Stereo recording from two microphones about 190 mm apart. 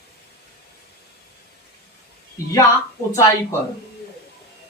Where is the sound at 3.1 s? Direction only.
15° left (ahead or behind).